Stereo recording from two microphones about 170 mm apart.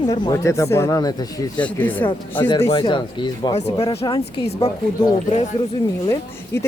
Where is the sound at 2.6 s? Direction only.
20° left (ahead or behind).